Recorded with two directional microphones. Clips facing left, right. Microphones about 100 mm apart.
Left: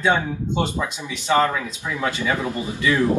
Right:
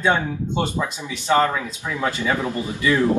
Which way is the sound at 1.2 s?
10° right (ahead or behind).